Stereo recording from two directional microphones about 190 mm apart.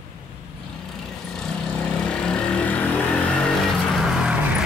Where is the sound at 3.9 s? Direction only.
5° right (ahead or behind).